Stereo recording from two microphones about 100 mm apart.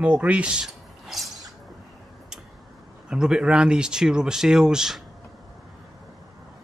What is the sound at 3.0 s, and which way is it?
Speech, 10° right (ahead or behind).